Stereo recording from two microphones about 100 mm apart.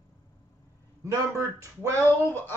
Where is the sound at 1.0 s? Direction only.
30° right (ahead or behind).